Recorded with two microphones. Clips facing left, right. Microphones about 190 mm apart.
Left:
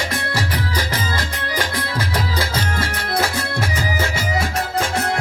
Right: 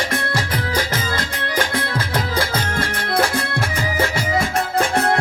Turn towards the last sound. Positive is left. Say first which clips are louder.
# right 2 dB
turn(degrees=-55)  # may be behind; listen again after turning